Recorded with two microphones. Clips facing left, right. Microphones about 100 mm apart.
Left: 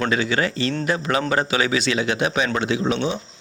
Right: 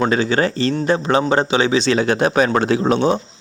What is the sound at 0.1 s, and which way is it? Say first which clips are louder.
Speech: right 4 dB; 35° right (ahead or behind).